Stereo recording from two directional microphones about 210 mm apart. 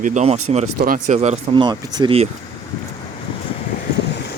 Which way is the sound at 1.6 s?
20° right (ahead or behind).